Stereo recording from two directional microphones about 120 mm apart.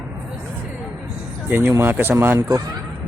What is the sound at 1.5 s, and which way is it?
Speech, 20° right (ahead or behind).